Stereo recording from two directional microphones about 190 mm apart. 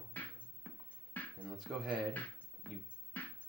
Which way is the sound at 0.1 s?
10° left (ahead or behind).